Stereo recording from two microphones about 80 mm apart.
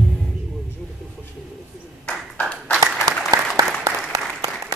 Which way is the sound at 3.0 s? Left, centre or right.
Right.